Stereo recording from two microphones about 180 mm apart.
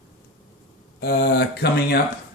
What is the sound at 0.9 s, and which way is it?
Speech, 60° left (ahead or behind).